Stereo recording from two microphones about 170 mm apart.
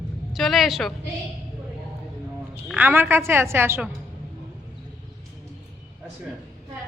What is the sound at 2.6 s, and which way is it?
A woman's voice, 10° right (ahead or behind).